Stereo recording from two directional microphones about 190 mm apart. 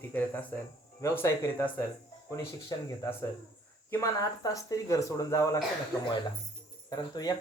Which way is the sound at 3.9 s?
15° left (ahead or behind).